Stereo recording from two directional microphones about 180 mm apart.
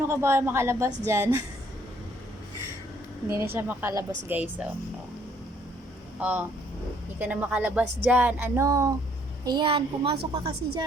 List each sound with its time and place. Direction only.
0.1 s speech: 15° right (ahead or behind)
3.2 s speech: 15° right (ahead or behind)
6.1 s a woman's voice: 10° right (ahead or behind)